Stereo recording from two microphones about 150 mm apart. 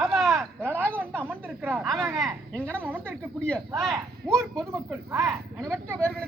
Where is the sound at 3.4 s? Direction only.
5° left (ahead or behind).